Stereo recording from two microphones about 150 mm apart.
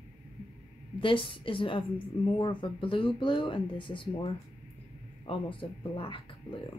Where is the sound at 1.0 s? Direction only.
35° left (ahead or behind).